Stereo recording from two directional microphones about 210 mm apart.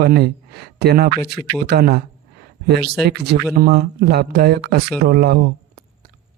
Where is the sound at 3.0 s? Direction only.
50° right (ahead or behind).